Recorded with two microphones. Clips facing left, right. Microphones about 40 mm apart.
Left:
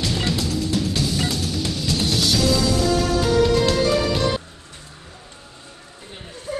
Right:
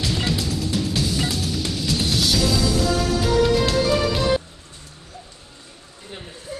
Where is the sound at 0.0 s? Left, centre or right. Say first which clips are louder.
Left 1 dB; centre.